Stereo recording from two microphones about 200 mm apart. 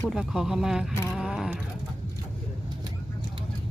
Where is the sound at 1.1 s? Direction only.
5° right (ahead or behind).